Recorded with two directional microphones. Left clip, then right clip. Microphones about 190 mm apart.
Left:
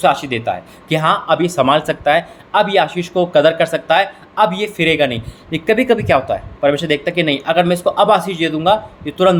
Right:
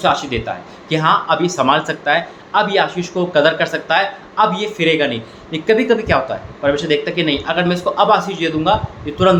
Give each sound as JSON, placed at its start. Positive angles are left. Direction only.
{"t": 0.0, "sound": "speech", "side_deg": 55}